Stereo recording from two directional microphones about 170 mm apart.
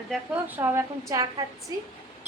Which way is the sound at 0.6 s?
15° right (ahead or behind).